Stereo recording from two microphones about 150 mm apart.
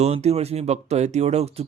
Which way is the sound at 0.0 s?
45° right (ahead or behind).